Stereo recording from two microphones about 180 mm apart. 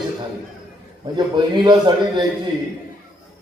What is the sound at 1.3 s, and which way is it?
Speech, 25° right (ahead or behind).